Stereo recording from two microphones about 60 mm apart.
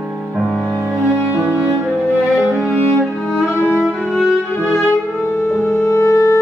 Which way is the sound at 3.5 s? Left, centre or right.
Left.